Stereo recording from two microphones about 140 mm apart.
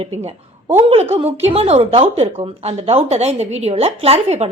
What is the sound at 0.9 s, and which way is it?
A woman's voice, 45° right (ahead or behind).